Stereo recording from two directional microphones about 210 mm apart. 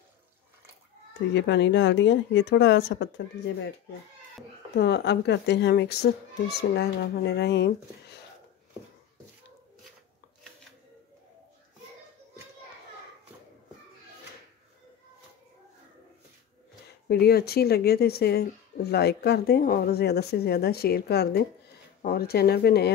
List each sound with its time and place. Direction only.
1.3 s speech: 55° left (ahead or behind)
4.7 s speech: 55° left (ahead or behind)
17.1 s speech: 50° left (ahead or behind)